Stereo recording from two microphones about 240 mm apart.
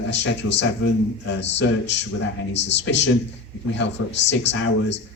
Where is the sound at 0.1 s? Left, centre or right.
Left.